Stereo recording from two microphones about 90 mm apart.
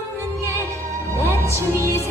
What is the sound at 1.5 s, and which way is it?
Music, 30° right (ahead or behind).